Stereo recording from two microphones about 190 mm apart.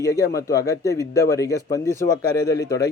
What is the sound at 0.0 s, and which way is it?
A man's voice, 15° left (ahead or behind).